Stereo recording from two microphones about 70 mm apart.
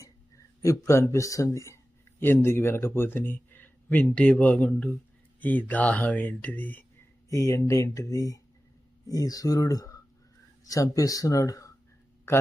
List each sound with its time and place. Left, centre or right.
0.6 s speech: left
2.2 s speech: left
7.3 s speech: left